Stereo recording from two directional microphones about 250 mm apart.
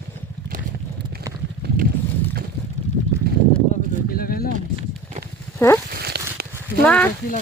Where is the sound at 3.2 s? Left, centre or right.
Right.